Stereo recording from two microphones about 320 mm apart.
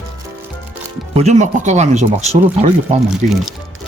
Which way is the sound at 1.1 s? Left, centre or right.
Right.